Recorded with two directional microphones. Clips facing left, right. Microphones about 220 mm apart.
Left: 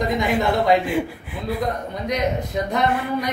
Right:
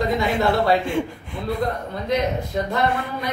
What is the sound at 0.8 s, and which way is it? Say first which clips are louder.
Speech: left 1 dB; 5° left (ahead or behind).